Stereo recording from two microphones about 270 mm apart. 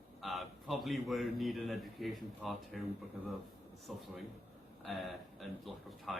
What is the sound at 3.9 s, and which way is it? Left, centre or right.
A man's voice, centre.